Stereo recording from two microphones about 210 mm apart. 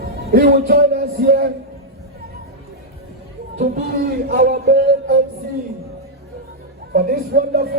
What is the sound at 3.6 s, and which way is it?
Speech, 45° right (ahead or behind).